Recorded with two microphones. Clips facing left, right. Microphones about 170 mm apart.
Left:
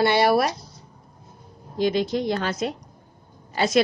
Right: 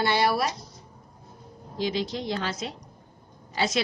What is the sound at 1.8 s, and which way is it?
A woman's voice, 55° left (ahead or behind).